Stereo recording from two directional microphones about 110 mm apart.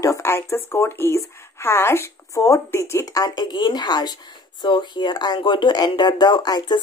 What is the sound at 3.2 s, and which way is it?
Speech, 40° left (ahead or behind).